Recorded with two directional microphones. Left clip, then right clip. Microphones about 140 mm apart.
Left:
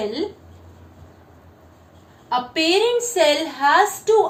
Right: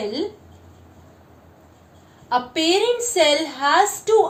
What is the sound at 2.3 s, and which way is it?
A woman's voice, 50° right (ahead or behind).